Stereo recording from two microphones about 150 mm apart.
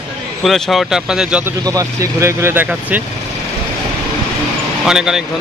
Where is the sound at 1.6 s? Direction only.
20° right (ahead or behind).